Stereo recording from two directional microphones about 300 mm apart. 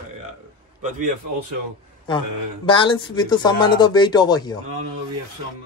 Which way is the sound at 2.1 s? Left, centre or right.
Centre.